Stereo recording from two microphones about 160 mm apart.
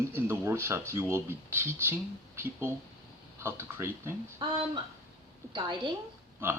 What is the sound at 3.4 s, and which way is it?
Speech, 15° right (ahead or behind).